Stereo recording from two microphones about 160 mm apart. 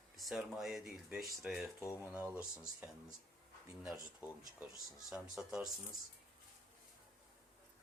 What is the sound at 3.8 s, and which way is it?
Speech, 5° right (ahead or behind).